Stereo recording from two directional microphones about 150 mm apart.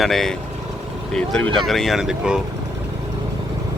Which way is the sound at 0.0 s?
Centre (ahead or behind).